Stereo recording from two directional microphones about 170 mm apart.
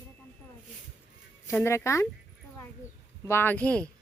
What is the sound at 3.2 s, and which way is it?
Speech, 15° left (ahead or behind).